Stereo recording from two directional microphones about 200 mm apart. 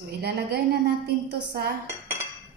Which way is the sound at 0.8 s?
55° right (ahead or behind).